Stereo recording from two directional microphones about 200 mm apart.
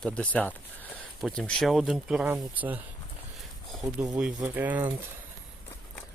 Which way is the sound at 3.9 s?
15° right (ahead or behind).